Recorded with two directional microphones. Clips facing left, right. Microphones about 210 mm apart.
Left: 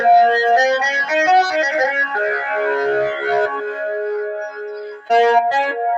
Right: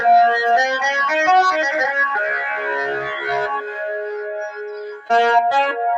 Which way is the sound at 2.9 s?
50° left (ahead or behind).